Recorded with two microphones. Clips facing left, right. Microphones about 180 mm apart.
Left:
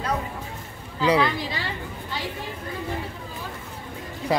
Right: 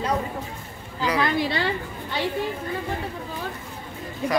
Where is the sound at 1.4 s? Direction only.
65° right (ahead or behind).